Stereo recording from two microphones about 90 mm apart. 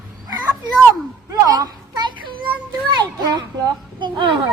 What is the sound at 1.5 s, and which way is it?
Children playing, 45° right (ahead or behind).